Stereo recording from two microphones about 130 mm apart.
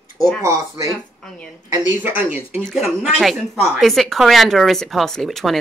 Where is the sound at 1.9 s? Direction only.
15° right (ahead or behind).